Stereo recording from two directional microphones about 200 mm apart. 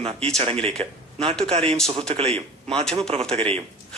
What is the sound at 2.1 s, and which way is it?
A man's voice, 30° right (ahead or behind).